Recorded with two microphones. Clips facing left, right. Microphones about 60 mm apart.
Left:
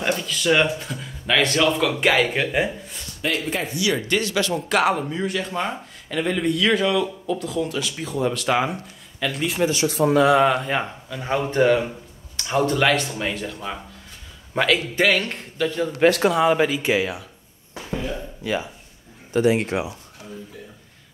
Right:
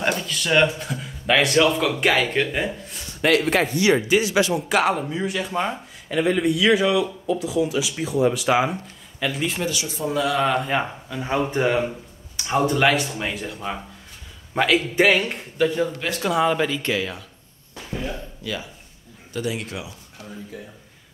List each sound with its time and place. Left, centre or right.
0.0 s speech: centre
3.2 s speech: right
3.7 s speech: right
4.1 s speech: centre
9.8 s speech: left
10.4 s a man's voice: centre
15.0 s speech: centre
16.3 s speech: centre
18.4 s speech: left
19.3 s speech: left